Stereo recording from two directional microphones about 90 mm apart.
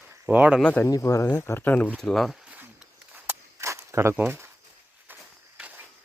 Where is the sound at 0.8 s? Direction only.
35° left (ahead or behind).